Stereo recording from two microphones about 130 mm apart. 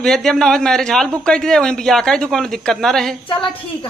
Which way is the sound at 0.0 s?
5° left (ahead or behind).